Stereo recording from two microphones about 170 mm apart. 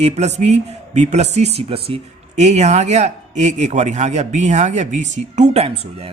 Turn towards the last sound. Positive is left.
turn(degrees=-35)  # may be behind; listen again after turning